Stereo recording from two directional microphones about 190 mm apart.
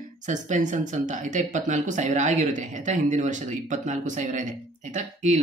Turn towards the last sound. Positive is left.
turn(degrees=-40)  # may be behind; listen again after turning